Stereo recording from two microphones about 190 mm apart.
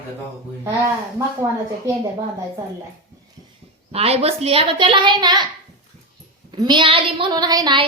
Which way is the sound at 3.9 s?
30° right (ahead or behind).